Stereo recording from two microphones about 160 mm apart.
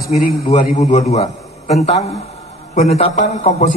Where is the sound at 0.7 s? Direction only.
45° left (ahead or behind).